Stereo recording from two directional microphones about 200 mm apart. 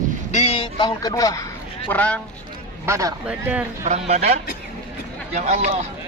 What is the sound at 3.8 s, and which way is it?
Speech, 35° right (ahead or behind).